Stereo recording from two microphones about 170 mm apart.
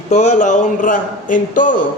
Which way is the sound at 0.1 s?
45° left (ahead or behind).